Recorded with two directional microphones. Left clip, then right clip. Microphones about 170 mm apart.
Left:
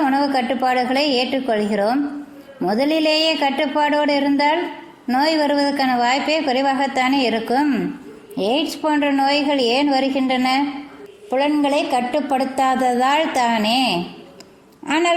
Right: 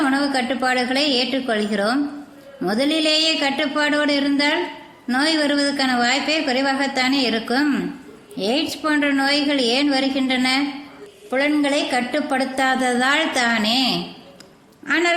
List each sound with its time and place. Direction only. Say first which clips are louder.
0.0 s a woman's voice: left 2 dB; 15° left (ahead or behind)